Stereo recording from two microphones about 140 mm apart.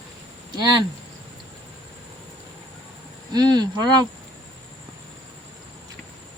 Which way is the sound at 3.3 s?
30° right (ahead or behind).